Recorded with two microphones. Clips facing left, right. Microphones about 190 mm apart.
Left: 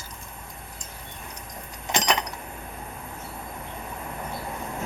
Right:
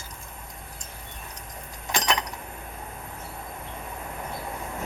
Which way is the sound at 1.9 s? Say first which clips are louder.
Left 2 dB; 20° left (ahead or behind).